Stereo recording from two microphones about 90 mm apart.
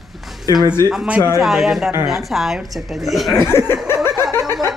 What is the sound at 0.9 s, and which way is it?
A woman's voice, 5° right (ahead or behind).